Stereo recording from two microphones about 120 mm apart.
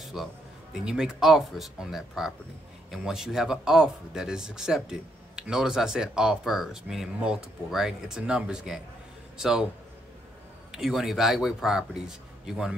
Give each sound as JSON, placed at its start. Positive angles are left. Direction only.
{"t": 0.0, "sound": "a sound", "side_deg": 0}
{"t": 0.8, "sound": "speech", "side_deg": -5}
{"t": 10.7, "sound": "speech", "side_deg": -5}